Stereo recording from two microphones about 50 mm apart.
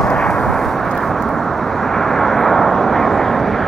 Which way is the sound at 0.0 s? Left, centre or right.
Centre.